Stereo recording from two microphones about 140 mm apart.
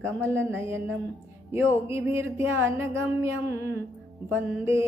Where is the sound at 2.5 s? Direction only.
15° right (ahead or behind).